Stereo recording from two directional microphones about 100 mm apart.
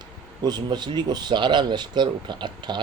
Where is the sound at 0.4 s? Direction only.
45° right (ahead or behind).